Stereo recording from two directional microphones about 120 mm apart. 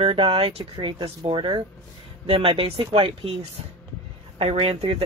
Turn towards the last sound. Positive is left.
turn(degrees=-50)  # may be behind; listen again after turning